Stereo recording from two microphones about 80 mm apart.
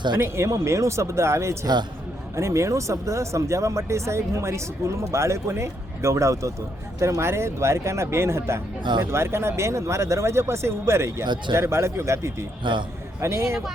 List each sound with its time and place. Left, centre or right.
0.2 s speech: right
8.8 s speech: right
9.0 s speech: right